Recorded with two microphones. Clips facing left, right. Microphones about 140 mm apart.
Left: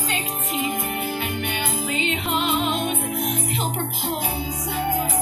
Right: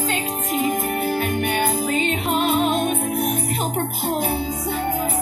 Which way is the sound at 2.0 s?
45° right (ahead or behind).